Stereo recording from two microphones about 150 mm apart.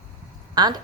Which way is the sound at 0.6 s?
30° right (ahead or behind).